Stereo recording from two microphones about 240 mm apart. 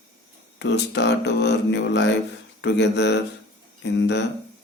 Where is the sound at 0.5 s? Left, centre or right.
Left.